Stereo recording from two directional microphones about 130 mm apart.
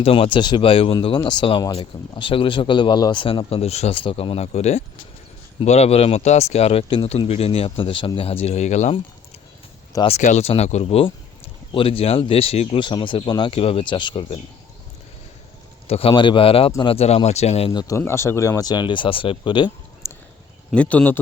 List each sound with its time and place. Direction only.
0.0 s speech: 45° left (ahead or behind); by 9.0 s 60° left (ahead or behind)
10.1 s speech: 65° left (ahead or behind); by 14.4 s 40° left (ahead or behind)
15.9 s speech: 45° left (ahead or behind)
17.7 s speech: 25° left (ahead or behind)
20.0 s a sound: 20° left (ahead or behind)
20.7 s speech: 10° left (ahead or behind)